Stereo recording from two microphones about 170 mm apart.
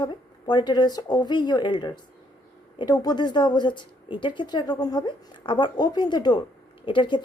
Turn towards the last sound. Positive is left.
turn(degrees=30)  # may be behind; listen again after turning